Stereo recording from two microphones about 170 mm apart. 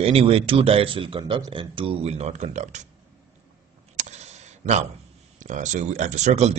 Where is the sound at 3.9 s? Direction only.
40° right (ahead or behind).